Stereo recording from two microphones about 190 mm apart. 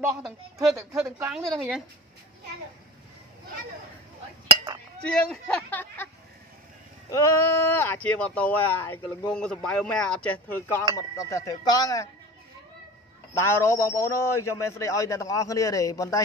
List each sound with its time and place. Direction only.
0.2 s speech: centre (ahead or behind)
1.0 s a woman's voice: 15° right (ahead or behind)
1.3 s speech: centre (ahead or behind)
5.0 s speech: 5° left (ahead or behind)
7.1 s speech: 15° left (ahead or behind)
13.4 s speech: 15° left (ahead or behind)